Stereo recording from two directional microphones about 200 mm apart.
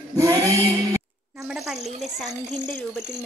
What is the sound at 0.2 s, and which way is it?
Male singing, 15° right (ahead or behind).